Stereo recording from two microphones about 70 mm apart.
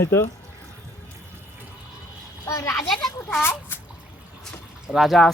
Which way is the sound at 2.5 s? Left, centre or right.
Left.